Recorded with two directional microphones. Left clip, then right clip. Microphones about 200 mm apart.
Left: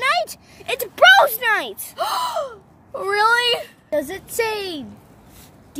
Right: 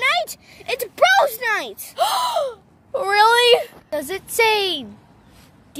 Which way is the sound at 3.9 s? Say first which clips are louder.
Left 2 dB; 45° right (ahead or behind).